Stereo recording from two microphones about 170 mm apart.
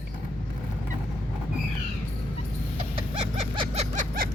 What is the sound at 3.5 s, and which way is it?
Vehicle, 40° right (ahead or behind).